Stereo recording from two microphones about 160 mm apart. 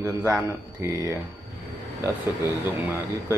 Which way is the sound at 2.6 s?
15° right (ahead or behind).